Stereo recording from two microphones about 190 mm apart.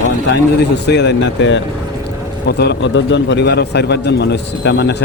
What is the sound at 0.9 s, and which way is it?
A man's voice, 65° left (ahead or behind).